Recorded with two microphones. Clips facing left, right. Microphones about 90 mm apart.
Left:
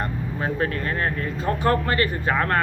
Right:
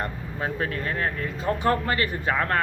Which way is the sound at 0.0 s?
40° left (ahead or behind).